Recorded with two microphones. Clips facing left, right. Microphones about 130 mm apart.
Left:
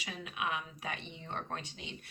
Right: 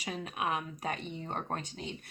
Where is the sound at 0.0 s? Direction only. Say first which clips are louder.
Right 4 dB; 40° right (ahead or behind).